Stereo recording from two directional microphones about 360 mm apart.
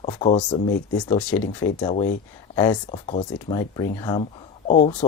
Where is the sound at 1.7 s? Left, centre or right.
Centre.